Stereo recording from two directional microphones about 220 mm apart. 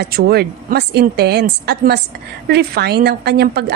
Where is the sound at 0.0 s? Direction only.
45° right (ahead or behind).